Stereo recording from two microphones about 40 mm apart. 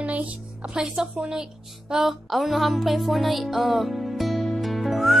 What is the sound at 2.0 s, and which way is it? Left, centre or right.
Music, centre.